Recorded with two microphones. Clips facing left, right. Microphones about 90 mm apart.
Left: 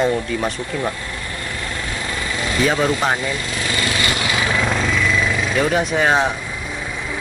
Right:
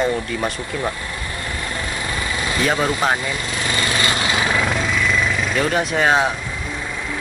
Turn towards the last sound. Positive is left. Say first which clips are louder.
# even
turn(degrees=0)  # may be behind; listen again after turning